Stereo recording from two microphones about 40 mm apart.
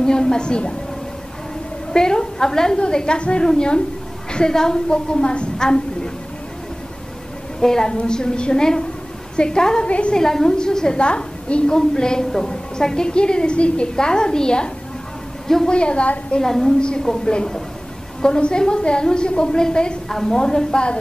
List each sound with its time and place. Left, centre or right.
0.0 s a woman's voice: centre
1.9 s a woman's voice: centre
7.6 s a woman's voice: centre
9.8 s a woman's voice: left
10.1 s a woman's voice: centre
15.4 s a woman's voice: centre
15.7 s a woman's voice: left
16.3 s a woman's voice: centre
20.1 s a woman's voice: centre